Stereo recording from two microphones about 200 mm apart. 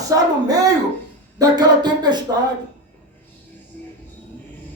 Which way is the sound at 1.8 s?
20° right (ahead or behind).